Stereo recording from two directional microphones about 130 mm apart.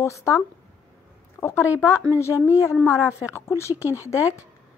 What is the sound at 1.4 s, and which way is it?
Speech, 20° left (ahead or behind).